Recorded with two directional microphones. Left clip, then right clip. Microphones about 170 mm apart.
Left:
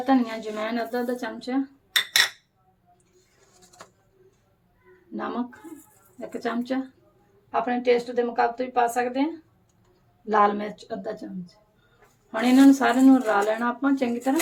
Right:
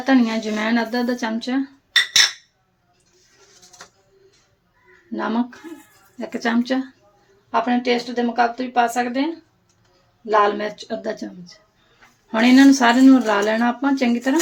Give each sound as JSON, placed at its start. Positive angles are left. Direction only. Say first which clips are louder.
{"t": 0.0, "sound": "speech", "louder": "right 5 dB", "side_deg": -30}
{"t": 6.1, "sound": "speech", "louder": "right 7 dB", "side_deg": -30}
{"t": 10.2, "sound": "speech", "louder": "right 4 dB", "side_deg": -40}